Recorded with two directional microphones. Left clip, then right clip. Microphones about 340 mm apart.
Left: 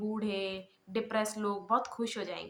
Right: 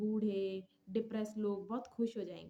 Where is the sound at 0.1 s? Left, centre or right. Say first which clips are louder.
Left 2 dB; right.